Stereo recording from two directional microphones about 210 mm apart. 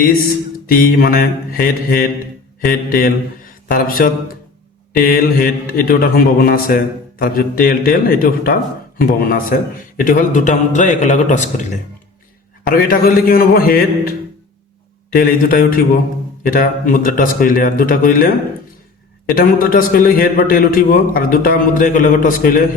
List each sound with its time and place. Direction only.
0.7 s a man's voice: 45° left (ahead or behind)
15.1 s a man's voice: 45° left (ahead or behind)